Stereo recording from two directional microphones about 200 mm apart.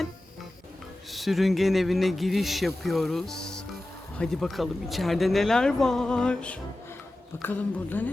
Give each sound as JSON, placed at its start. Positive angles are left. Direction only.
{"t": 1.1, "sound": "speech", "side_deg": 0}